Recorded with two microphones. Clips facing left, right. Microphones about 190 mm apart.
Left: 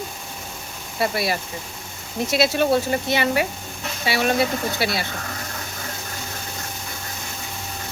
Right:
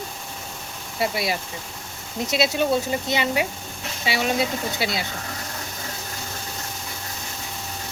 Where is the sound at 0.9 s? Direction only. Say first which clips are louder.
Left 2 dB; 15° right (ahead or behind).